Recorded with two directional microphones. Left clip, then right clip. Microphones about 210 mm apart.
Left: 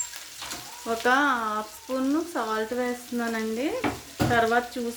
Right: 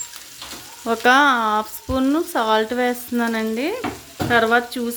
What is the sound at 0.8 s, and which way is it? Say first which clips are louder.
Frying: right 8 dB; 40° right (ahead or behind).